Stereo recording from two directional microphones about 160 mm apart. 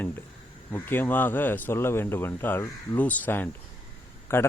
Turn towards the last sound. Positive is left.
turn(degrees=15)  # may be behind; listen again after turning